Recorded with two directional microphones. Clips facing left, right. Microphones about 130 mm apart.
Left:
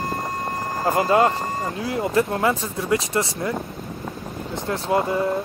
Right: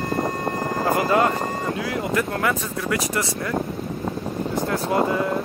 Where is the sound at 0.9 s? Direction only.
30° left (ahead or behind).